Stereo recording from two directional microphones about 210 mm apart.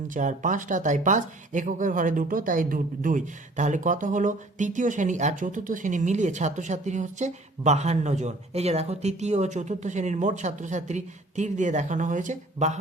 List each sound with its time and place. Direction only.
0.1 s speech: 35° right (ahead or behind)